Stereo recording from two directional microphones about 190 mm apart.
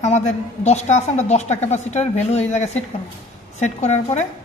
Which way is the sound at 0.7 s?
35° left (ahead or behind).